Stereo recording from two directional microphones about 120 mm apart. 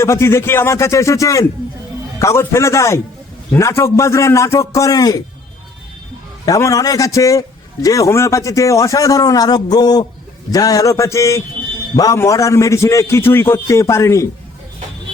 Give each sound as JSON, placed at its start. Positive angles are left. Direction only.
{"t": 0.0, "sound": "a man's voice", "side_deg": 20}
{"t": 6.4, "sound": "a man's voice", "side_deg": 25}